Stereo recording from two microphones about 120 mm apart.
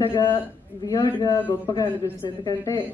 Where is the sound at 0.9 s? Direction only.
35° left (ahead or behind).